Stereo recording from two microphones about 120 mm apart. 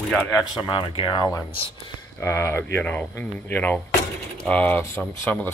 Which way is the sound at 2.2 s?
25° left (ahead or behind).